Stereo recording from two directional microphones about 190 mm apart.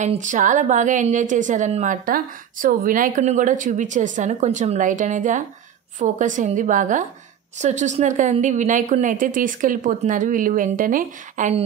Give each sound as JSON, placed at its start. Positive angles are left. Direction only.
{"t": 0.0, "sound": "a woman's voice", "side_deg": -40}